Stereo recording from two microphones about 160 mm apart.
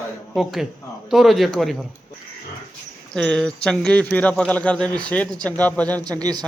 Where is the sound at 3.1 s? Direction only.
5° left (ahead or behind).